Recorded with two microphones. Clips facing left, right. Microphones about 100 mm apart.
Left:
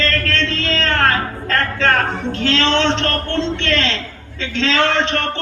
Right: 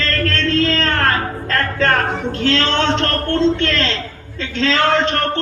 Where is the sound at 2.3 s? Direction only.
45° right (ahead or behind).